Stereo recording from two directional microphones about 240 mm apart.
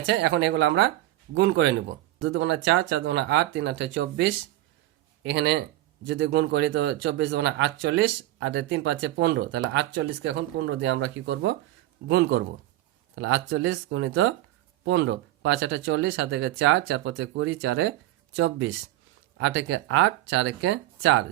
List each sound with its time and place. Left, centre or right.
0.0 s a man's voice: right